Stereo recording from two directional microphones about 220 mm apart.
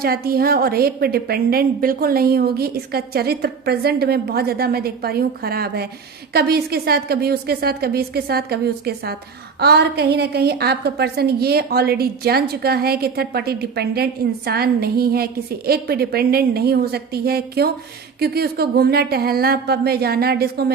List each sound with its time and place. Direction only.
0.0 s a woman's voice: 45° right (ahead or behind)